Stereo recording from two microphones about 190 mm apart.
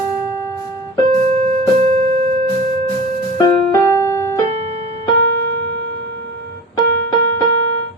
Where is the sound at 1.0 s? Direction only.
35° right (ahead or behind).